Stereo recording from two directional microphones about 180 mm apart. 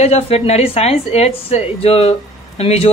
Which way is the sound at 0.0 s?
35° left (ahead or behind).